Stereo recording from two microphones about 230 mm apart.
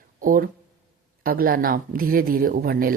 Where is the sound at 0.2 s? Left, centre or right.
Right.